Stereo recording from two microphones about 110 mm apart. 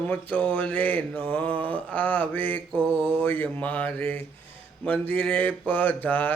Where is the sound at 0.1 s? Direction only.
15° left (ahead or behind).